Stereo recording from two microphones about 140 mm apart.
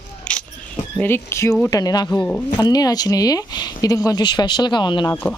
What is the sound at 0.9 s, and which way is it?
Speech, 15° left (ahead or behind).